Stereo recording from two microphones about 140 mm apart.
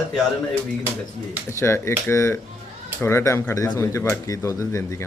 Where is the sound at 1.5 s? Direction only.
20° left (ahead or behind).